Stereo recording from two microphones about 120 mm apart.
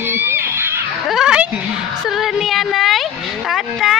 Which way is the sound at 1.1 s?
5° right (ahead or behind).